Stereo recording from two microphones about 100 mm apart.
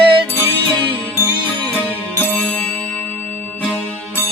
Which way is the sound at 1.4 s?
15° left (ahead or behind).